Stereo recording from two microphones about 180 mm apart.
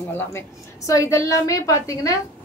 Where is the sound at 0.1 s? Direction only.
15° left (ahead or behind).